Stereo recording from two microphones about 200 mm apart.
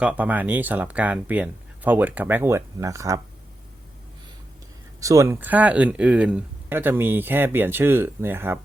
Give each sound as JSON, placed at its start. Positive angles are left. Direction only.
{"t": 0.0, "sound": "speech", "side_deg": -5}
{"t": 4.9, "sound": "speech", "side_deg": -15}